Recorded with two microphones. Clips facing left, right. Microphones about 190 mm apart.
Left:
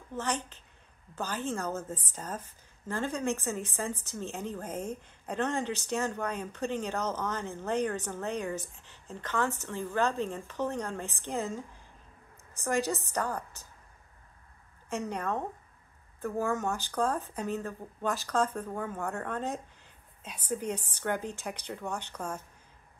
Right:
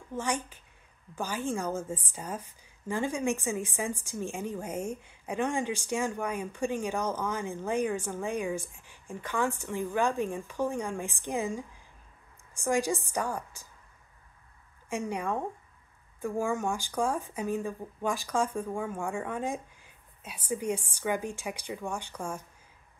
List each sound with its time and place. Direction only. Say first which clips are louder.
0.1 s a woman's voice: right 1 dB; 10° right (ahead or behind)
14.9 s a woman's voice: right 1 dB; 10° right (ahead or behind)